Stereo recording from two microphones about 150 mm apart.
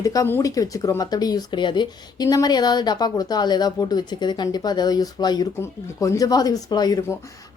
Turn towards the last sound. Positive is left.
turn(degrees=25)  # may be behind; listen again after turning